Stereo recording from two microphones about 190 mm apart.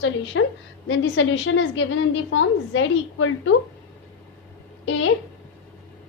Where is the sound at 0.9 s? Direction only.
75° left (ahead or behind).